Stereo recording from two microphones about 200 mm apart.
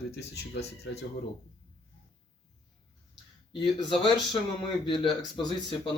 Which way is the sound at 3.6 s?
20° left (ahead or behind).